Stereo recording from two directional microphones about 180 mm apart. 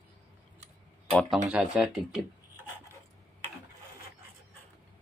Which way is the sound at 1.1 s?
Centre (ahead or behind).